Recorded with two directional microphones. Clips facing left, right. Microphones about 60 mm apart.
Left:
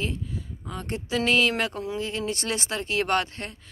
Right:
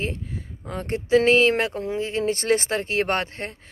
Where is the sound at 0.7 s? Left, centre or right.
Right.